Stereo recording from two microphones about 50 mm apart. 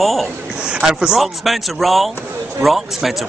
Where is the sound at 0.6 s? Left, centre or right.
Centre.